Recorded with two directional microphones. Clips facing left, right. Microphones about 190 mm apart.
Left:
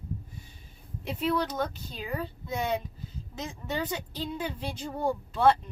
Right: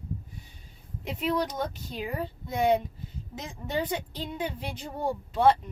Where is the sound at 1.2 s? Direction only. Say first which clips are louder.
Even; 15° right (ahead or behind).